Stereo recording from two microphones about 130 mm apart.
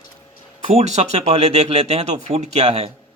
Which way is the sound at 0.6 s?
60° right (ahead or behind).